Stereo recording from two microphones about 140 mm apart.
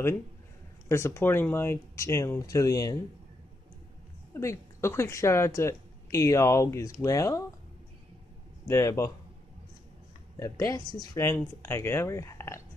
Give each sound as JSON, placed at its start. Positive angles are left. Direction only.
{"t": 0.8, "sound": "speech", "side_deg": 20}
{"t": 4.3, "sound": "speech", "side_deg": 20}
{"t": 8.6, "sound": "speech", "side_deg": 20}
{"t": 10.3, "sound": "speech", "side_deg": 25}